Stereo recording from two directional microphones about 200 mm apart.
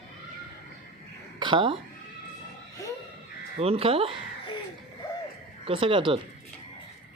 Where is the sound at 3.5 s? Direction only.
30° right (ahead or behind).